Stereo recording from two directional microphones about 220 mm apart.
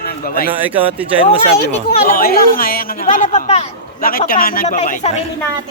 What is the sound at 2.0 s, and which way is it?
Speech, 40° left (ahead or behind).